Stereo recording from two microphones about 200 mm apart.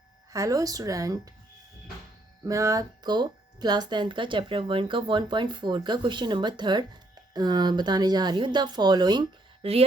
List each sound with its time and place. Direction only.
0.3 s speech: 15° right (ahead or behind)
2.4 s speech: 15° right (ahead or behind)